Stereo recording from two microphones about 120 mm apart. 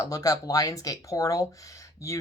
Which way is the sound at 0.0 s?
30° left (ahead or behind).